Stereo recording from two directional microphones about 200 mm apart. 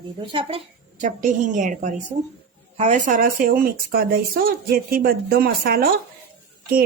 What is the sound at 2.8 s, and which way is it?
Speech, 40° right (ahead or behind).